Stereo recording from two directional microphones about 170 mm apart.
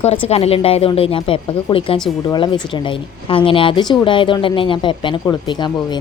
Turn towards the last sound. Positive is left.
turn(degrees=25)  # may be behind; listen again after turning